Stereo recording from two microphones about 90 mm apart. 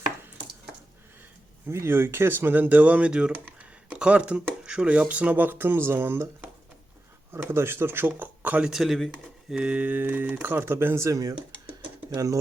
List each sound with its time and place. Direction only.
1.6 s speech: 30° right (ahead or behind)
7.4 s speech: 25° right (ahead or behind)
8.7 s speech: centre (ahead or behind)
9.5 s speech: 15° right (ahead or behind); by 12.4 s 40° right (ahead or behind)